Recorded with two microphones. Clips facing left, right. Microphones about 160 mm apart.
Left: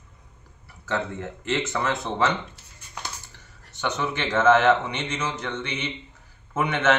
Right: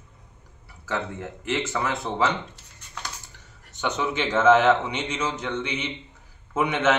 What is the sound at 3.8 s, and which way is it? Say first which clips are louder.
A man's voice: right 1 dB; 15° right (ahead or behind).